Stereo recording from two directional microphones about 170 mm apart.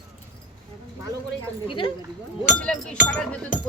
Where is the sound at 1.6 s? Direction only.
30° left (ahead or behind).